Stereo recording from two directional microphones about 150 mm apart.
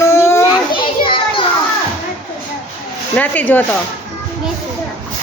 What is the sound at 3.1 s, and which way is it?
Speech, 10° left (ahead or behind).